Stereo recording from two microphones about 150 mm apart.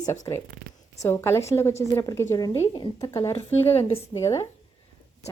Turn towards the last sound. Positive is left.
turn(degrees=20)  # may be behind; listen again after turning